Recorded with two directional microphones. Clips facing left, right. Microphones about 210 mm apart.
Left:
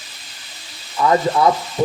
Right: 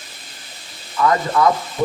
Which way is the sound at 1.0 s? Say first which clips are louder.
Left 1 dB; 30° left (ahead or behind).